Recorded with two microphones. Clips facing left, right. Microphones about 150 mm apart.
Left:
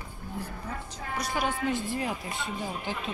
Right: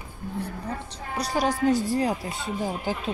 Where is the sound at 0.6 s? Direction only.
35° right (ahead or behind).